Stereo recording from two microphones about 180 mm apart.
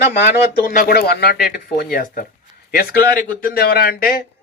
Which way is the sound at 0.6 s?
50° left (ahead or behind).